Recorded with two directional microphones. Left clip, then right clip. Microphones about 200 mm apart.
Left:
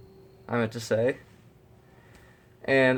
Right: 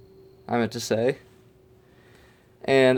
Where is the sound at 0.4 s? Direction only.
45° right (ahead or behind).